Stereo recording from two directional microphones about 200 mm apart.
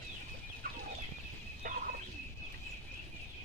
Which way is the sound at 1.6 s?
40° right (ahead or behind).